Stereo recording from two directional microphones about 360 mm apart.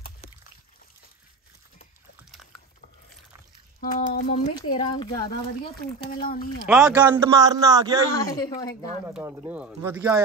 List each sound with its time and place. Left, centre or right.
3.8 s speech: left
5.8 s speech: left
6.6 s speech: centre
8.1 s speech: centre
9.0 s speech: centre